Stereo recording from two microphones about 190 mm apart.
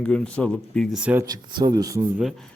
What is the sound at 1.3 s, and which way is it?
Speech, 20° right (ahead or behind).